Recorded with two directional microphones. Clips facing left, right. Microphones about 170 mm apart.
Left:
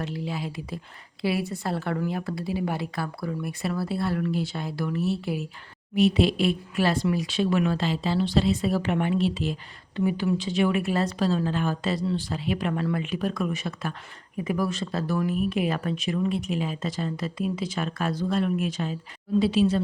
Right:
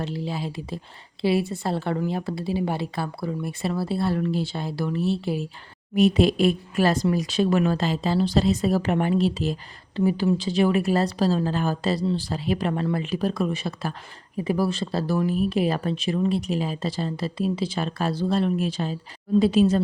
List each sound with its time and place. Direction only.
0.0 s a woman's voice: 30° right (ahead or behind)
5.9 s speech: 45° right (ahead or behind)
19.4 s speech: 45° right (ahead or behind)